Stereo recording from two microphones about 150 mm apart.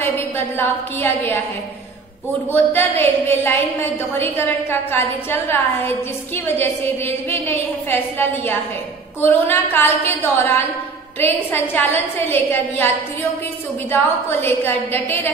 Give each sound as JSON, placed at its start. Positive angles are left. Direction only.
{"t": 0.6, "sound": "a woman's voice", "side_deg": 15}
{"t": 2.5, "sound": "a woman's voice", "side_deg": 15}
{"t": 14.4, "sound": "a woman's voice", "side_deg": 15}